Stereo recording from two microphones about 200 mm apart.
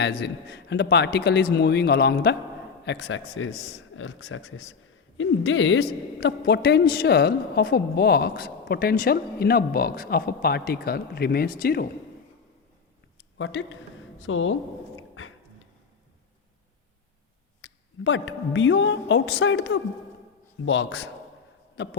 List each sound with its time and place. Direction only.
0.0 s a man's voice: 55° left (ahead or behind); by 5.8 s 70° left (ahead or behind)
6.1 s a woman's voice: 55° left (ahead or behind)
13.4 s speech: 65° left (ahead or behind)
17.6 s a man's voice: 65° left (ahead or behind)